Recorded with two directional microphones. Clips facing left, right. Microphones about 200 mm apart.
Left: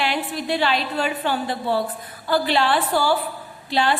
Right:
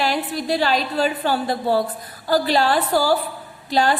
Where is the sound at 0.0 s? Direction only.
40° right (ahead or behind).